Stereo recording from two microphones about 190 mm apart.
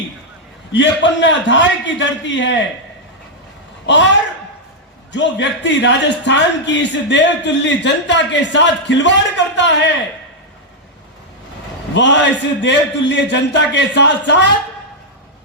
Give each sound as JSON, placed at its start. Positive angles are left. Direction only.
{"t": 0.7, "sound": "speech", "side_deg": 70}
{"t": 5.1, "sound": "speech", "side_deg": 70}
{"t": 11.9, "sound": "speech", "side_deg": 70}